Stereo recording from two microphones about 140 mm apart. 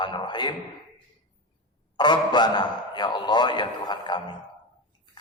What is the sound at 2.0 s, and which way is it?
A man's voice, 30° left (ahead or behind).